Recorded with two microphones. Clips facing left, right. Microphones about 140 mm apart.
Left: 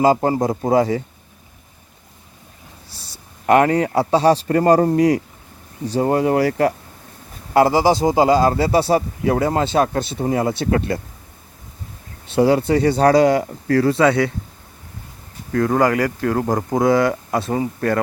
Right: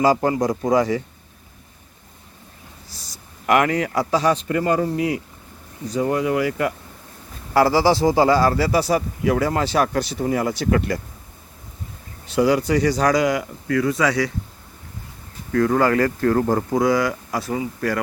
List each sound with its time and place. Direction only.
0.0 s a man's voice: 25° left (ahead or behind)
3.4 s speech: 35° left (ahead or behind)
5.8 s speech: 30° left (ahead or behind)
7.5 s a man's voice: 20° left (ahead or behind)
12.3 s a man's voice: 30° left (ahead or behind)
15.5 s a man's voice: 20° left (ahead or behind)
17.5 s speech: 40° left (ahead or behind)